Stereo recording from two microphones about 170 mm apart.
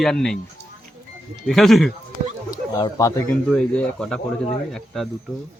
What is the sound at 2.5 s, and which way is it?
Speech, 20° left (ahead or behind).